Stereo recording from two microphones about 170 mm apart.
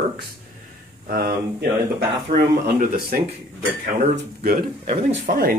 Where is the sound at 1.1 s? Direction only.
65° right (ahead or behind).